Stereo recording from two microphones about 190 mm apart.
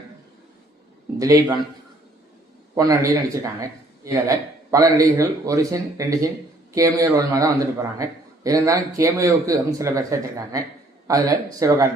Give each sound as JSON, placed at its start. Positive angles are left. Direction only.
{"t": 1.2, "sound": "a man's voice", "side_deg": -20}
{"t": 2.7, "sound": "a man's voice", "side_deg": -20}